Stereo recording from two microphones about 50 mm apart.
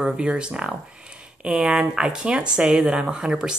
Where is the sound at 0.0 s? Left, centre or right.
Centre.